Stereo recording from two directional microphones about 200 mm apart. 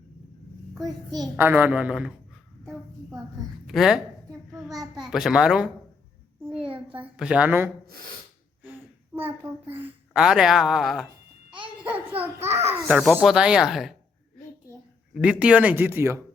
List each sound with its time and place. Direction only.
1.1 s speech: 15° right (ahead or behind)
3.7 s a child's voice: centre (ahead or behind)
6.4 s a sound: 5° right (ahead or behind)
7.0 s speech: 5° right (ahead or behind)
9.1 s a child's voice: 10° right (ahead or behind)
12.4 s a child's voice: 30° right (ahead or behind)
12.9 s a child's voice: centre (ahead or behind)
15.1 s speech: 5° right (ahead or behind)